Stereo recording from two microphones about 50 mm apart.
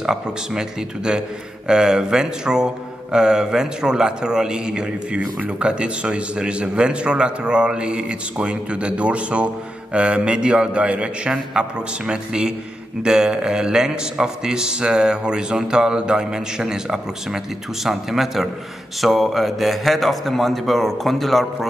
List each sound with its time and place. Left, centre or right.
0.0 s a man's voice: centre